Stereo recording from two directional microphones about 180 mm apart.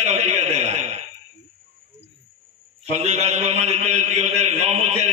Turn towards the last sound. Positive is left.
turn(degrees=-40)  # may be behind; listen again after turning